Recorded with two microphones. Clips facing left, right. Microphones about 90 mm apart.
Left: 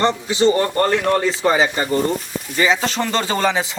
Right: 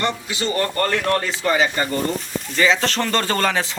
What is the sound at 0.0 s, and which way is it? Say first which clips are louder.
A man's voice: left 8 dB; 30° left (ahead or behind).